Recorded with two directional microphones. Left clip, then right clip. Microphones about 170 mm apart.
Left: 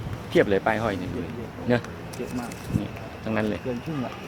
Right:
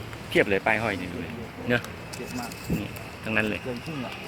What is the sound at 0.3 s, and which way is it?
Speech, 10° left (ahead or behind).